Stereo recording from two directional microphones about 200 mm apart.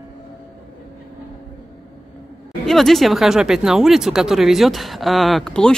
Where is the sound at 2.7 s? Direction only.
Centre (ahead or behind).